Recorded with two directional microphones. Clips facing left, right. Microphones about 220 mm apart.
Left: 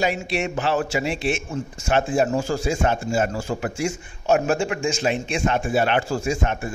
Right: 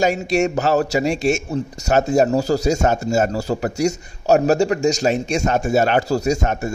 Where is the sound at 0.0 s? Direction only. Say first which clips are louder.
Right 6 dB; 45° right (ahead or behind).